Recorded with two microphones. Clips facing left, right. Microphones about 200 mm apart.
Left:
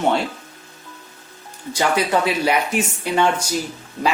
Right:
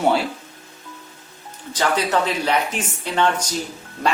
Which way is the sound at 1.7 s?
10° left (ahead or behind).